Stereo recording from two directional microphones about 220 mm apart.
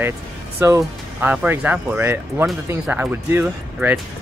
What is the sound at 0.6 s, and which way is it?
Speech, 10° right (ahead or behind).